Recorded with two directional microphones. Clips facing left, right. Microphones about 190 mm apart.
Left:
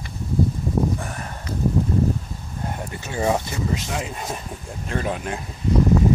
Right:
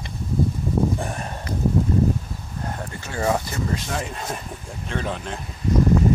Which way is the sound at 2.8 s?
15° left (ahead or behind).